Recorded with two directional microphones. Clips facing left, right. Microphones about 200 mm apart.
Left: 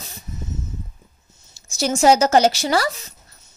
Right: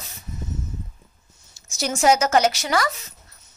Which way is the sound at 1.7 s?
30° left (ahead or behind).